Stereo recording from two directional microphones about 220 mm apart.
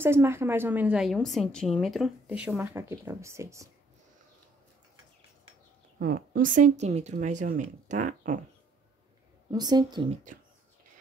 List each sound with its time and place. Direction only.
0.0 s a woman's voice: 10° right (ahead or behind)
5.9 s speech: 40° right (ahead or behind)
9.5 s speech: 20° right (ahead or behind)